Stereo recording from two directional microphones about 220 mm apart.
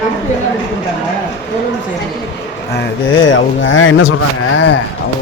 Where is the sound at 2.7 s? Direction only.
60° left (ahead or behind).